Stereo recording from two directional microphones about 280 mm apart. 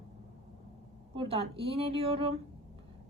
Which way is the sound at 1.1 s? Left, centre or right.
Centre.